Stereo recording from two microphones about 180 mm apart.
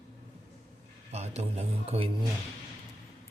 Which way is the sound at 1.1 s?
35° right (ahead or behind).